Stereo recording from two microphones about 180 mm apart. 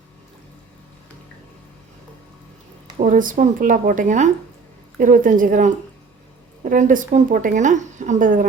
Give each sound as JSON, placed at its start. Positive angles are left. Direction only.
{"t": 3.0, "sound": "speech", "side_deg": -50}